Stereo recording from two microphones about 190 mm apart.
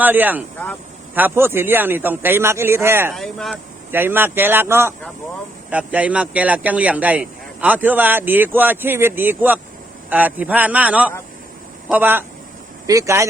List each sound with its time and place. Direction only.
0.0 s speech: 10° right (ahead or behind)
3.1 s speech: centre (ahead or behind)
3.9 s speech: 10° right (ahead or behind)